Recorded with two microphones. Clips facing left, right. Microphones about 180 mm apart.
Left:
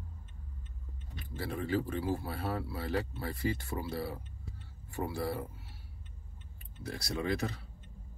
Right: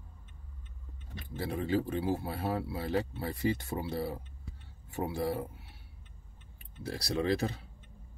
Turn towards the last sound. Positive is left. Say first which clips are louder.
# right 3 dB
turn(degrees=-30)  # may be behind; listen again after turning